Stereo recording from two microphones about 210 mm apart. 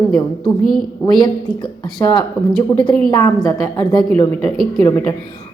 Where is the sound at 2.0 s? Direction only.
15° left (ahead or behind).